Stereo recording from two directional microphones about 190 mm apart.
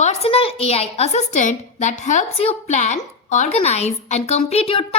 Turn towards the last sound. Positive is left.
turn(degrees=30)  # may be behind; listen again after turning